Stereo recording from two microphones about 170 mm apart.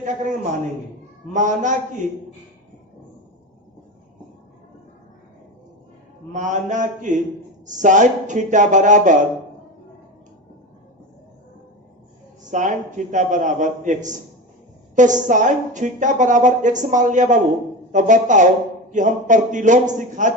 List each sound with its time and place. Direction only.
0.0 s a woman's voice: 50° right (ahead or behind)
6.3 s a woman's voice: 45° right (ahead or behind)
12.5 s a woman's voice: 45° right (ahead or behind)